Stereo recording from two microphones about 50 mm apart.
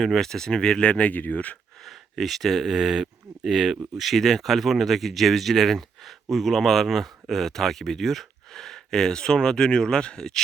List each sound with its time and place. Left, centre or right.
0.0 s speech: centre
0.9 s speech: left
1.8 s speech: centre